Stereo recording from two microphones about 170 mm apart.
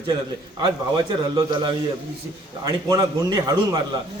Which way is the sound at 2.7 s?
20° right (ahead or behind).